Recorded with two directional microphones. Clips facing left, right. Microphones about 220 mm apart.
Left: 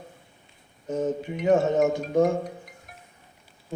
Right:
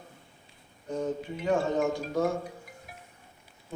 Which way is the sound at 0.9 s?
20° left (ahead or behind).